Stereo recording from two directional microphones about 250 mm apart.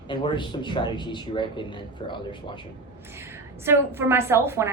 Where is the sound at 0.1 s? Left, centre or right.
Centre.